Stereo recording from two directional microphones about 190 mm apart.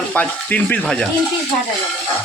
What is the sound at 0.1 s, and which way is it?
Speech, 10° left (ahead or behind).